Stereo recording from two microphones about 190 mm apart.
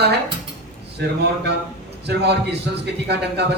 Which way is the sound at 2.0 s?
60° right (ahead or behind).